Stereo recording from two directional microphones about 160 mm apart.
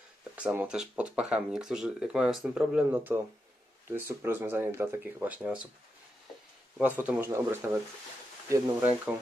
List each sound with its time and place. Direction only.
0.3 s speech: 10° right (ahead or behind)
6.8 s speech: 10° right (ahead or behind)